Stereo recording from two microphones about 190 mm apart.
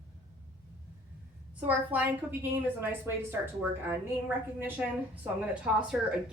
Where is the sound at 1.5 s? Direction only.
10° right (ahead or behind).